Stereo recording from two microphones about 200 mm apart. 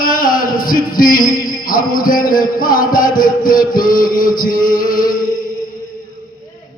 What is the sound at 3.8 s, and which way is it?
Speech, 20° left (ahead or behind).